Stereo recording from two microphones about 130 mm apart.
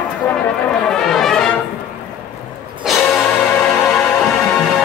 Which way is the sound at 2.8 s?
Centre (ahead or behind).